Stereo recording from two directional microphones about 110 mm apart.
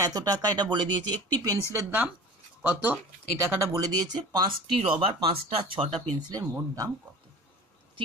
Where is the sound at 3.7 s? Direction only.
40° right (ahead or behind).